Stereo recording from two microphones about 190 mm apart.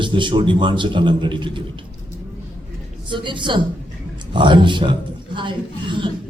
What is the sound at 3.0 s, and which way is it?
A man's voice, 25° right (ahead or behind).